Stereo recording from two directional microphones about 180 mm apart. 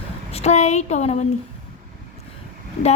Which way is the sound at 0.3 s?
35° left (ahead or behind).